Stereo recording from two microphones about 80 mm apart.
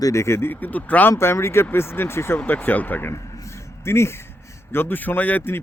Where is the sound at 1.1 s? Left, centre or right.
Left.